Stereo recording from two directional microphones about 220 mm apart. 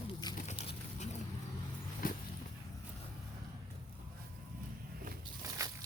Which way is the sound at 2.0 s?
40° left (ahead or behind).